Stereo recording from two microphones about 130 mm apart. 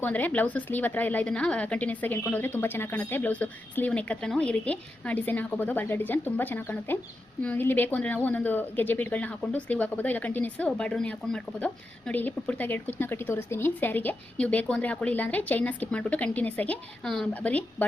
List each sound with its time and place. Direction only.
0.0 s speech: 15° left (ahead or behind)